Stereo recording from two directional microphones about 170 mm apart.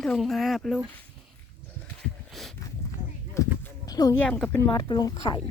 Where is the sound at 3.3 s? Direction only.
15° left (ahead or behind).